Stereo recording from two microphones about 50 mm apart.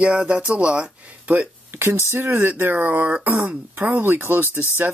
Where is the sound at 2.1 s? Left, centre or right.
Right.